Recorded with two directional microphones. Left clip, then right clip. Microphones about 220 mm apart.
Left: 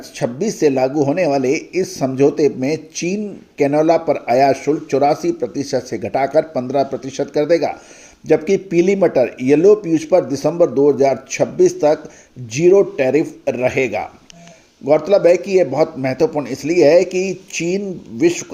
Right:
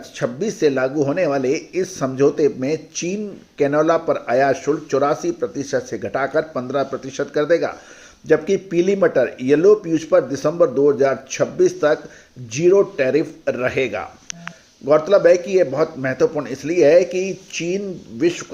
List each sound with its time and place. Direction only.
0.2 s speech: 20° left (ahead or behind)